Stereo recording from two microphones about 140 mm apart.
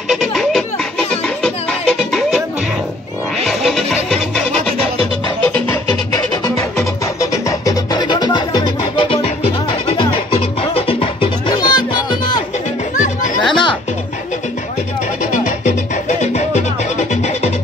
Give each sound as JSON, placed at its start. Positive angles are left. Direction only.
{"t": 0.1, "sound": "music", "side_deg": 0}
{"t": 3.4, "sound": "music", "side_deg": 0}
{"t": 4.5, "sound": "music", "side_deg": -45}
{"t": 6.8, "sound": "music", "side_deg": 20}
{"t": 12.9, "sound": "music", "side_deg": 65}
{"t": 13.5, "sound": "music", "side_deg": 35}
{"t": 15.3, "sound": "music", "side_deg": 60}